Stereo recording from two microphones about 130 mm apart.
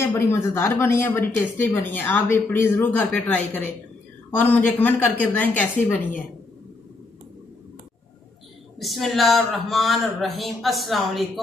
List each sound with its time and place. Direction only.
0.0 s a woman's voice: 20° left (ahead or behind)
8.7 s speech: centre (ahead or behind)